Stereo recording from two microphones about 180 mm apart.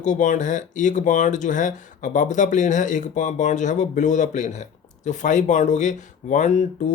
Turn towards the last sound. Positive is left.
turn(degrees=40)  # may be behind; listen again after turning